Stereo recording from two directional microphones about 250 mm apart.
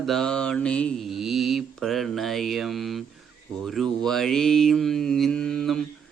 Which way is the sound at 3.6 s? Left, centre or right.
Centre.